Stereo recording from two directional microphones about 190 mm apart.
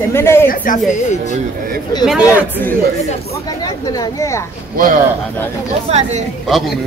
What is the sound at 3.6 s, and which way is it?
Speech, 20° left (ahead or behind).